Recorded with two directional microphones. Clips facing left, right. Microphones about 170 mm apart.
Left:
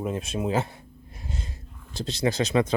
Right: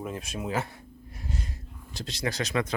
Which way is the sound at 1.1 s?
25° left (ahead or behind).